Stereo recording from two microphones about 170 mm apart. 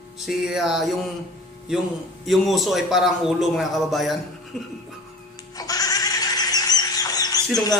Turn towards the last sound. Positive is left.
turn(degrees=20)  # may be behind; listen again after turning